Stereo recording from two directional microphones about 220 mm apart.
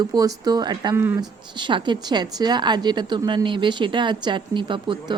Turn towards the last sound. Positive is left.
turn(degrees=-20)  # may be behind; listen again after turning